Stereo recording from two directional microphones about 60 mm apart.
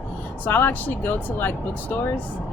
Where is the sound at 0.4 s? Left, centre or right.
Left.